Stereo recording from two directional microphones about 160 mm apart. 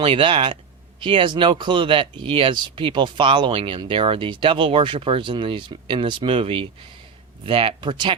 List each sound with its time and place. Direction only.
0.0 s speech: 35° right (ahead or behind)